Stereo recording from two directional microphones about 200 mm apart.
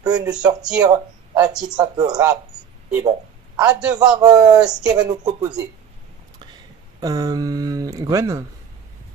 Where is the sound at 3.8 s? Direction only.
20° right (ahead or behind).